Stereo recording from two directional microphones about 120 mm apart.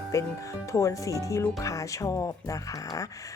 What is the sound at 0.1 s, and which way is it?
Speech, 25° left (ahead or behind).